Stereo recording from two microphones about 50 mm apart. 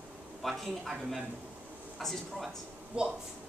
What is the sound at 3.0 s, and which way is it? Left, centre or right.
Speech, centre.